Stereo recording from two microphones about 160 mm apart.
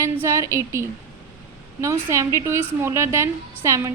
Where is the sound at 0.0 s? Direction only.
15° right (ahead or behind).